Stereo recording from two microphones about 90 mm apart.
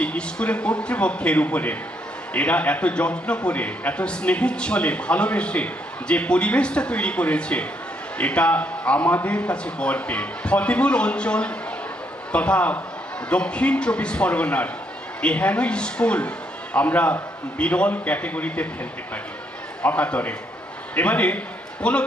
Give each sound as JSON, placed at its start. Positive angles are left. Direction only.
{"t": 0.0, "sound": "a man's voice", "side_deg": 10}
{"t": 19.8, "sound": "a man's voice", "side_deg": 15}